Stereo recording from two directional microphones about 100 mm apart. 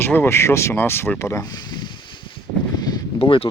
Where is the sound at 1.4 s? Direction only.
45° left (ahead or behind).